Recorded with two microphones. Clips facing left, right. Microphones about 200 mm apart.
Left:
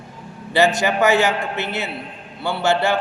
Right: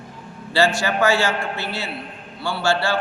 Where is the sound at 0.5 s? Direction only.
20° left (ahead or behind).